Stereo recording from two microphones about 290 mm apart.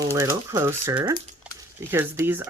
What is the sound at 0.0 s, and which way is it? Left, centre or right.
Speech, centre.